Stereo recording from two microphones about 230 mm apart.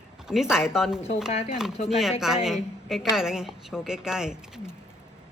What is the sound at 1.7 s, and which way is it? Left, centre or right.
Speech, left.